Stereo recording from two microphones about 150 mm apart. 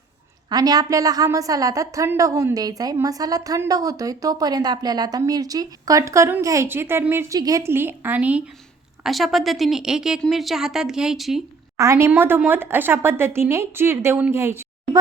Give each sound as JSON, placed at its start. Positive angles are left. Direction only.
{"t": 0.5, "sound": "a woman's voice", "side_deg": -25}
{"t": 11.8, "sound": "speech", "side_deg": -20}